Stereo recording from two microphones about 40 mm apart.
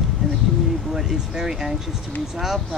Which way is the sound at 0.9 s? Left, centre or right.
Centre.